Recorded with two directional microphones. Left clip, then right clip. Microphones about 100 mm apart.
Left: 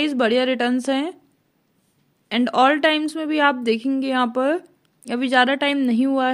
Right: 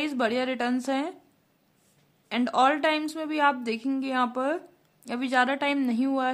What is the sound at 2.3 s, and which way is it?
Speech, 25° left (ahead or behind).